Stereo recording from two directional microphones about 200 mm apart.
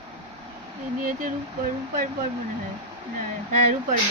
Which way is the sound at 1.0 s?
45° right (ahead or behind).